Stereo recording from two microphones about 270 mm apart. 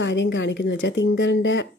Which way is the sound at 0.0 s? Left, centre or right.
Left.